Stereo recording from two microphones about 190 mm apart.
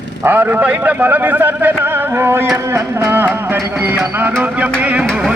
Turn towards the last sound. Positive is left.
turn(degrees=0)  # may be behind; listen again after turning